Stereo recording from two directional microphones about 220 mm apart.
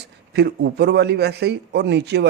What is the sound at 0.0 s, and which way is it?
A man's voice, 50° right (ahead or behind).